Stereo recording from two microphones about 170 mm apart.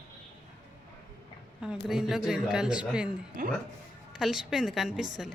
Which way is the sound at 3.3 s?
55° right (ahead or behind).